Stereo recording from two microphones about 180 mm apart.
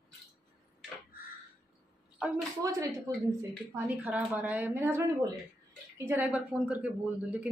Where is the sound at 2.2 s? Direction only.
5° right (ahead or behind).